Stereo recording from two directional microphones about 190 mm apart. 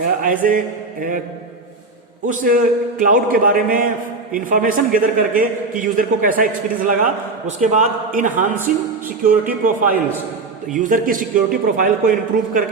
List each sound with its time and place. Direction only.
0.0 s a man's voice: 45° right (ahead or behind)
2.2 s a man's voice: 45° right (ahead or behind)
10.8 s a man's voice: 45° right (ahead or behind)